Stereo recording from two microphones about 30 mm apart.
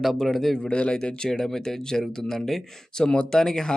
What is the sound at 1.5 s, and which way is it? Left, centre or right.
Speech, centre.